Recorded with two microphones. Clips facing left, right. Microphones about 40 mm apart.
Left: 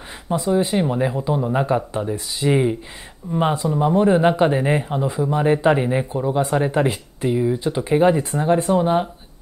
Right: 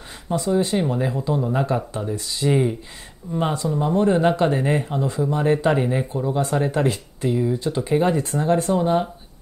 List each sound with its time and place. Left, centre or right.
0.3 s speech: left